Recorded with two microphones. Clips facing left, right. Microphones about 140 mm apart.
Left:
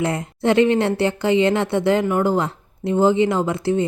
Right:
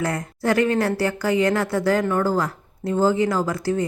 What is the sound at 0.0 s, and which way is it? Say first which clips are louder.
A woman's voice: left 3 dB; 25° left (ahead or behind).